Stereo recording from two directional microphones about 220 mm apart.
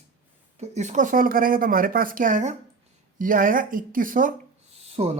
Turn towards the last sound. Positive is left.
turn(degrees=-25)  # may be behind; listen again after turning